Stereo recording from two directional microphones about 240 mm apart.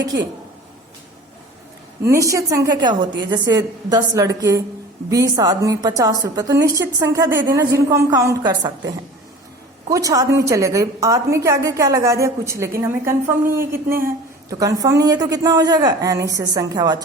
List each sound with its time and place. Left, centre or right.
2.0 s a woman's voice: centre
9.9 s a woman's voice: centre